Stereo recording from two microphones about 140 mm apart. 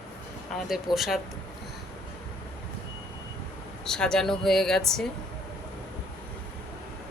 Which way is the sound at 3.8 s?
5° left (ahead or behind).